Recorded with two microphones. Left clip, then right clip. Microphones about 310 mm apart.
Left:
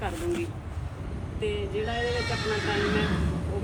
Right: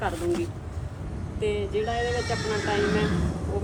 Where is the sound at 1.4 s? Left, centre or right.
Right.